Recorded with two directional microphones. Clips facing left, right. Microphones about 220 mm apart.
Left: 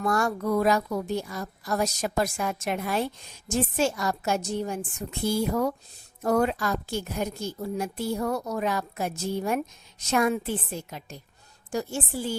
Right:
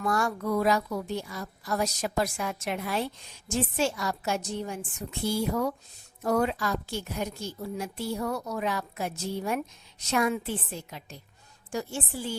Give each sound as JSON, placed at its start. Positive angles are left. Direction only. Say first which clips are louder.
{"t": 0.0, "sound": "a woman's voice", "louder": "left 2 dB", "side_deg": 45}